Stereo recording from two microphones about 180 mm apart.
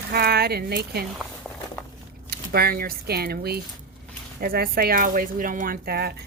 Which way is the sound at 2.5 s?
55° right (ahead or behind).